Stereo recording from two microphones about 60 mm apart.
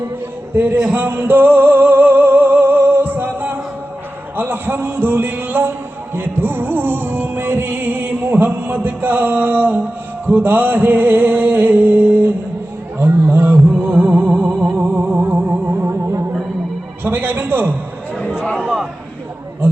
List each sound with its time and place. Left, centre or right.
0.5 s music: right
13.0 s a sound: right
14.3 s music: centre
14.8 s music: right
15.7 s music: right
17.0 s a sound: right